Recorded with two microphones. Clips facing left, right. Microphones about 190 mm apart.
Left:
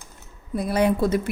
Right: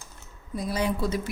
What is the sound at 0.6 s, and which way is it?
Speech, 60° left (ahead or behind).